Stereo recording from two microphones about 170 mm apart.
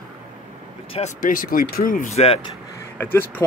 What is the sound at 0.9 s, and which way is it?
Speech, 45° left (ahead or behind).